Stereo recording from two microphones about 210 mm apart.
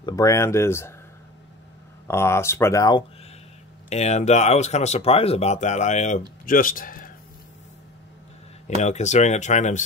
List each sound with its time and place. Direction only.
0.0 s speech: 15° left (ahead or behind)
2.0 s speech: 10° left (ahead or behind)
3.9 s speech: 30° left (ahead or behind)
8.6 s speech: 35° left (ahead or behind)